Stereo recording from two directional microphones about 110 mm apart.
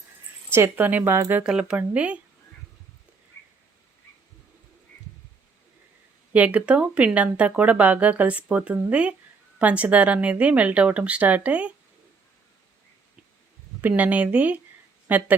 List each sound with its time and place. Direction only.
0.5 s speech: 20° right (ahead or behind)
1.5 s speech: 10° right (ahead or behind)
6.3 s speech: 15° right (ahead or behind)
13.8 s speech: 15° right (ahead or behind)